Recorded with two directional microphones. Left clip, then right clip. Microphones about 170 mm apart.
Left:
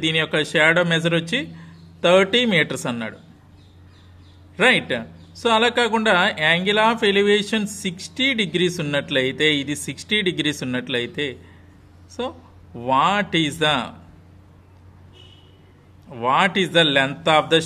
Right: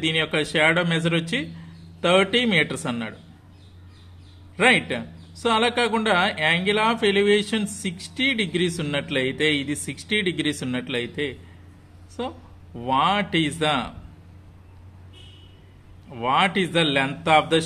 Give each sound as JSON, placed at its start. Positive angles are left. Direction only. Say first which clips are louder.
{"t": 0.0, "sound": "a man's voice", "louder": "left 2 dB", "side_deg": 25}
{"t": 4.6, "sound": "a man's voice", "louder": "left 2 dB", "side_deg": 25}
{"t": 16.1, "sound": "a man's voice", "louder": "left 2 dB", "side_deg": 20}